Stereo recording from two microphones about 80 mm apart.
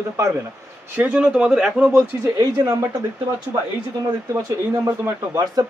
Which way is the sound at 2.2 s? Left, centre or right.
Right.